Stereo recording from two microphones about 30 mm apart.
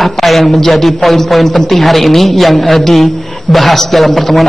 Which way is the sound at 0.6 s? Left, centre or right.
Centre.